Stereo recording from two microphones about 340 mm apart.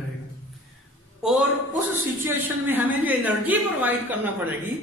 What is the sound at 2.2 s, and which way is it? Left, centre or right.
A man's voice, centre.